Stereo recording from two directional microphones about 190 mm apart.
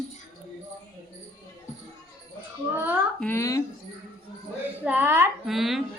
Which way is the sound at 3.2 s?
15° left (ahead or behind).